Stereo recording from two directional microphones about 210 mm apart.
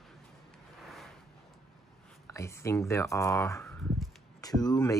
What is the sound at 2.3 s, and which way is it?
Speech, 15° left (ahead or behind).